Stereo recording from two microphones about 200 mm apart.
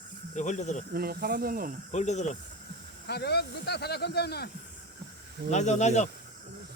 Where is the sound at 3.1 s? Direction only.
55° left (ahead or behind).